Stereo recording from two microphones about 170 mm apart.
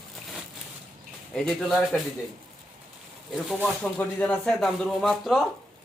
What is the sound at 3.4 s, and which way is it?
Speech, 5° left (ahead or behind).